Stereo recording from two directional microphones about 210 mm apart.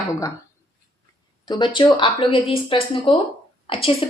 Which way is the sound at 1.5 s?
25° left (ahead or behind).